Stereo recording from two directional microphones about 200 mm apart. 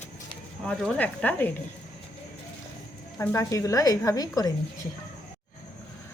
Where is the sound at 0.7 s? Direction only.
5° left (ahead or behind).